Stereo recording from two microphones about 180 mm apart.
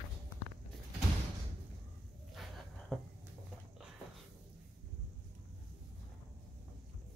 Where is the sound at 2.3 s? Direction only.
Centre (ahead or behind).